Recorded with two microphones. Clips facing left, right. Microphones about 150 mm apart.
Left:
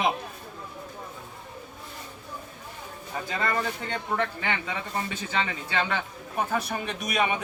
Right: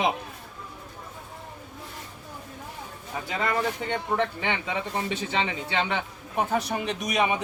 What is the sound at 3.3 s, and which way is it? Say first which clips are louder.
Speech: right 2 dB; 15° right (ahead or behind).